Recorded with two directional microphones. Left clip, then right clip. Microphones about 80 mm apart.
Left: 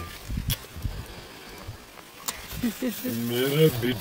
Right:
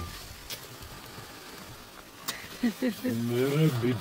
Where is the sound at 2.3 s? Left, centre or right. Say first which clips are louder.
Left 1 dB; left.